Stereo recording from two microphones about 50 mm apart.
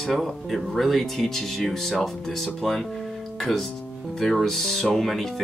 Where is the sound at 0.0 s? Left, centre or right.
Centre.